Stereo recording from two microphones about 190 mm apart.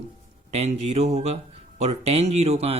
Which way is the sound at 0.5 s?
35° right (ahead or behind).